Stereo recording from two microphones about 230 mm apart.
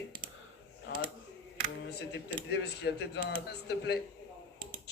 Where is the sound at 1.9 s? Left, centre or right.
Left.